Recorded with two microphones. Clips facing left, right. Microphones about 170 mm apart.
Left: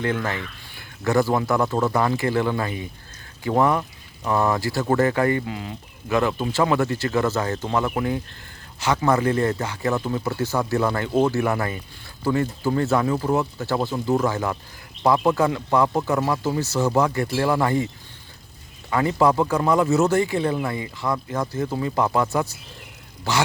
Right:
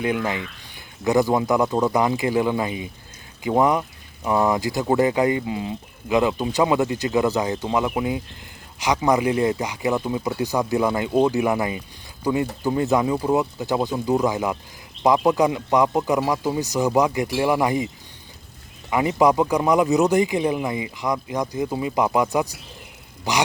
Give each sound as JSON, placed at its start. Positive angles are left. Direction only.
{"t": 0.0, "sound": "speech", "side_deg": -15}
{"t": 18.9, "sound": "speech", "side_deg": -15}